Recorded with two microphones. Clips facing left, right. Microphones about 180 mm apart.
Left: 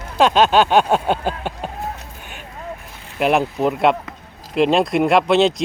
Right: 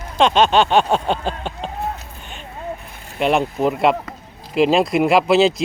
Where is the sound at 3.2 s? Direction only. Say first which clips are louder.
Even; centre (ahead or behind).